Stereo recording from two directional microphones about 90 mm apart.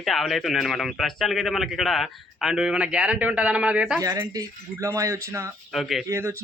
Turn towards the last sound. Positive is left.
turn(degrees=-30)  # may be behind; listen again after turning